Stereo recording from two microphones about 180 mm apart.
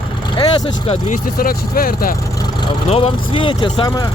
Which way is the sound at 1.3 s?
55° left (ahead or behind).